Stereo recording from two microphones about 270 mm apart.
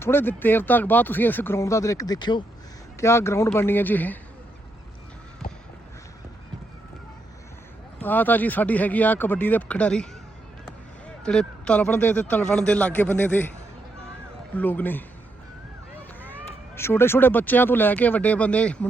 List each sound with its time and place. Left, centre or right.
0.0 s speech: centre
5.4 s a sound: left
8.0 s speech: centre
11.2 s a man's voice: centre
14.5 s speech: centre
16.7 s speech: centre